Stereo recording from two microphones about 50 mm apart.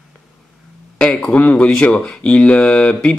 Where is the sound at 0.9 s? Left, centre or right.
Left.